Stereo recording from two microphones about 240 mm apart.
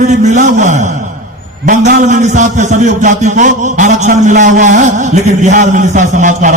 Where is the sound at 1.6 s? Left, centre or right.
Right.